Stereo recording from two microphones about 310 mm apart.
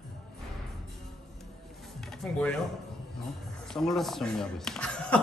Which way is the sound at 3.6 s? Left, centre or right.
Centre.